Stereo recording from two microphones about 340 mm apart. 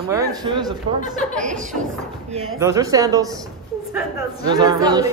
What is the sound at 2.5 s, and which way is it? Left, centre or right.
Speech, centre.